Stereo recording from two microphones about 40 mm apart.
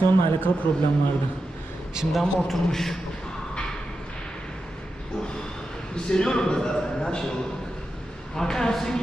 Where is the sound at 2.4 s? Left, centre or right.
Centre.